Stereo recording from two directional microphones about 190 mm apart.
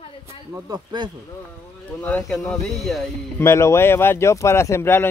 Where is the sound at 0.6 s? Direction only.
20° right (ahead or behind).